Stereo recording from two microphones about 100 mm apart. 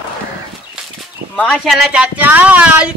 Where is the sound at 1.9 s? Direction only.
15° right (ahead or behind).